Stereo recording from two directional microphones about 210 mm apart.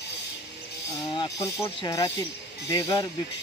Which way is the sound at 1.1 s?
15° left (ahead or behind).